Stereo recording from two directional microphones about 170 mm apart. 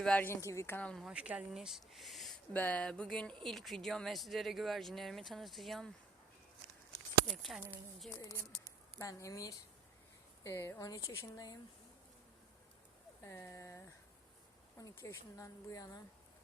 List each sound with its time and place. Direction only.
0.0 s speech: 10° left (ahead or behind)
7.3 s speech: centre (ahead or behind)
8.2 s speech: 20° left (ahead or behind)
13.2 s speech: 15° left (ahead or behind)